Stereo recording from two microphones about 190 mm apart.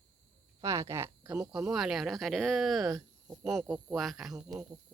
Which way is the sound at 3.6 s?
Centre (ahead or behind).